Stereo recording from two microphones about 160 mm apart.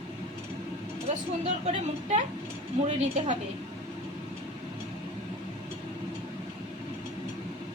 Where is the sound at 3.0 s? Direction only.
45° right (ahead or behind).